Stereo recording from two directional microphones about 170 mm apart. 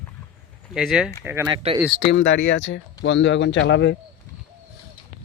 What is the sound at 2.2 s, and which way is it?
Speech, 80° left.